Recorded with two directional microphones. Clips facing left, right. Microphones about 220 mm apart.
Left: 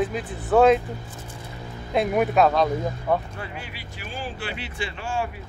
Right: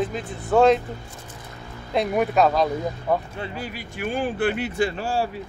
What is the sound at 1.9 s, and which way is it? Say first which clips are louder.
Speech: even; centre (ahead or behind).